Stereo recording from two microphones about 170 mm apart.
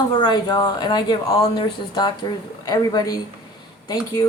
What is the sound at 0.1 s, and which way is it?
Speech, 25° left (ahead or behind).